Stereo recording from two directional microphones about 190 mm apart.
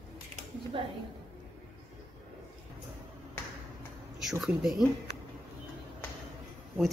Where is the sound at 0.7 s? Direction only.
30° right (ahead or behind).